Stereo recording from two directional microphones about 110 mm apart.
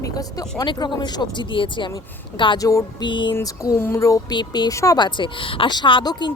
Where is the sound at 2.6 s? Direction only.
30° left (ahead or behind).